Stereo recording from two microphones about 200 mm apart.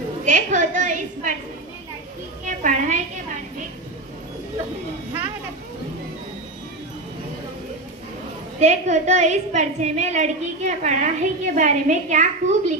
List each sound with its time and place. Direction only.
0.2 s a woman's voice: 40° right (ahead or behind)
2.4 s a woman's voice: 40° right (ahead or behind)
8.5 s a woman's voice: 35° right (ahead or behind)